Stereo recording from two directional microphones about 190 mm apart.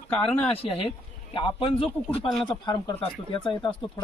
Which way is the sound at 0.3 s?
10° left (ahead or behind).